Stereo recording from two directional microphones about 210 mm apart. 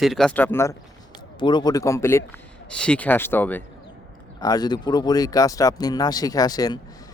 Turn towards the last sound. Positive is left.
turn(degrees=20)  # may be behind; listen again after turning